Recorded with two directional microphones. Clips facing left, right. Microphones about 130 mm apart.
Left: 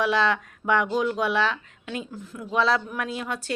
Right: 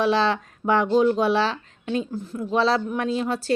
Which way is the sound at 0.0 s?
30° right (ahead or behind).